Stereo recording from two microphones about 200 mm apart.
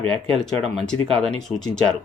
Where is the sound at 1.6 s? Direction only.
5° left (ahead or behind).